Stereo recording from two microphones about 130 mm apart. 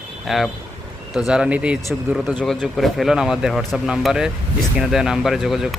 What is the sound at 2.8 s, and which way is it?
Speech, centre (ahead or behind).